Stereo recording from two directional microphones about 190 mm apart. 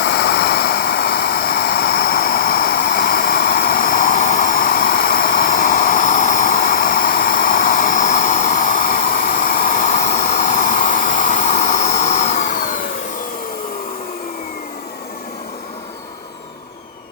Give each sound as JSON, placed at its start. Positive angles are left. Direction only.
{"t": 0.0, "sound": "vehicle", "side_deg": 60}